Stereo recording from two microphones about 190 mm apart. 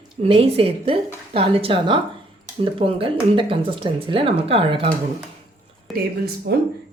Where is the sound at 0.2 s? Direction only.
30° right (ahead or behind).